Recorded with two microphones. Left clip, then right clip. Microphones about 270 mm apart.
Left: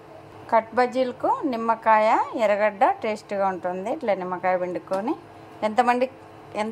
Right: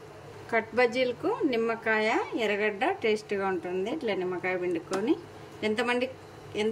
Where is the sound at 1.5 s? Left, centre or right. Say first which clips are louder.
Left 8 dB; centre.